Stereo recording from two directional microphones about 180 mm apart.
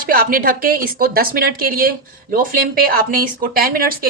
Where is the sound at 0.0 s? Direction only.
55° right (ahead or behind).